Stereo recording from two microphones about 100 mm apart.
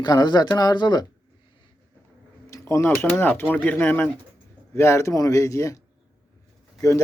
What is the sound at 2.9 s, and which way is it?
Speech, 20° left (ahead or behind).